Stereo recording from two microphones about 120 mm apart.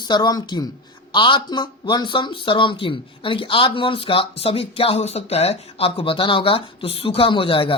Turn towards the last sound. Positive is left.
turn(degrees=45)  # may be behind; listen again after turning